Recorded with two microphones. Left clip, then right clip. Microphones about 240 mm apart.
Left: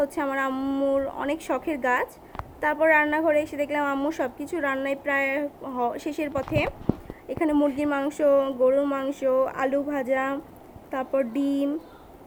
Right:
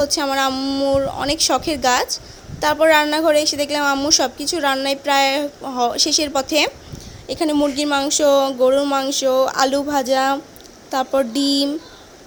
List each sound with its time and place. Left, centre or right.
0.2 s a woman's voice: right
0.5 s a woman's voice: centre; by 6.7 s right
7.3 s a woman's voice: centre